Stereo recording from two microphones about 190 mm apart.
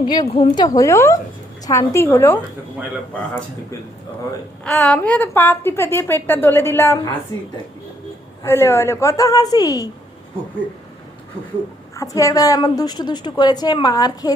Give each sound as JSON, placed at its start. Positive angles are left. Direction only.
{"t": 0.0, "sound": "a woman's voice", "side_deg": 20}
{"t": 4.6, "sound": "a woman's voice", "side_deg": 5}
{"t": 8.4, "sound": "a woman's voice", "side_deg": 15}
{"t": 11.9, "sound": "a woman's voice", "side_deg": 15}